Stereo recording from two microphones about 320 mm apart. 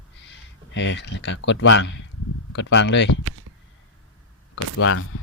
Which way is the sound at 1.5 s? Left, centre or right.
Left.